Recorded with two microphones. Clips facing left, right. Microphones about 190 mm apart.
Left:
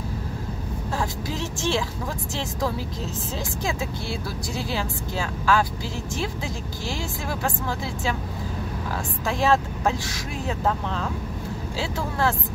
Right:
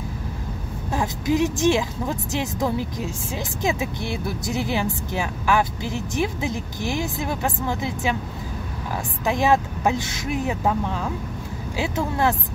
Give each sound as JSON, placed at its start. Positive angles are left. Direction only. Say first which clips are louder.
{"t": 0.9, "sound": "a woman's voice", "louder": "right 8 dB", "side_deg": -15}
{"t": 9.2, "sound": "a woman's voice", "louder": "right 2 dB", "side_deg": -15}